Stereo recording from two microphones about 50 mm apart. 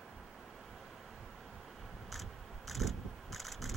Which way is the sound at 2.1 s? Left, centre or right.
Centre.